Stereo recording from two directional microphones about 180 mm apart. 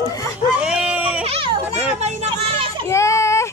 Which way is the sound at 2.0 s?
35° right (ahead or behind).